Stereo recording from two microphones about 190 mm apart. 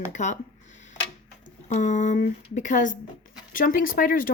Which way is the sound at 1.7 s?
40° left (ahead or behind).